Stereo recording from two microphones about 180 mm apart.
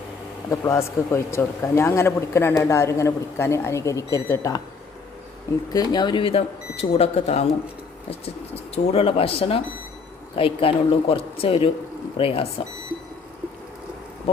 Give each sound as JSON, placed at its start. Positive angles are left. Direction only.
{"t": 0.5, "sound": "speech", "side_deg": 15}
{"t": 5.7, "sound": "speech", "side_deg": 25}